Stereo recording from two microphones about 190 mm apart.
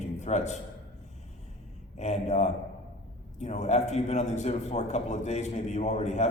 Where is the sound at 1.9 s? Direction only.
35° left (ahead or behind).